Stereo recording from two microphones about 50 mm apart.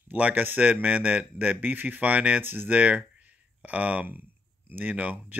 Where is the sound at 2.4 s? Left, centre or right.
Right.